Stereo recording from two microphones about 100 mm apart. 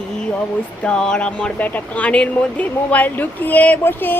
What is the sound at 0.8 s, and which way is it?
Speech, 10° left (ahead or behind).